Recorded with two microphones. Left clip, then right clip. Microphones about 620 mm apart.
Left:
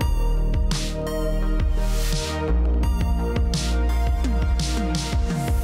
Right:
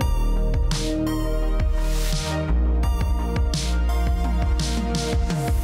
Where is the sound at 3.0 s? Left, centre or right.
Centre.